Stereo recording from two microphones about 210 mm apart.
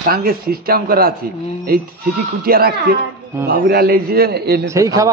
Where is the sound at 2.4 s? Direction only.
45° right (ahead or behind).